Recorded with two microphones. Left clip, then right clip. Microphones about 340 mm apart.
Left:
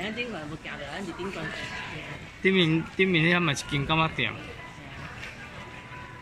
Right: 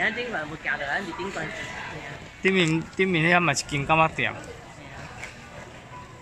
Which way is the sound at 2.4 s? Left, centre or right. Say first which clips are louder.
Right 1 dB; centre.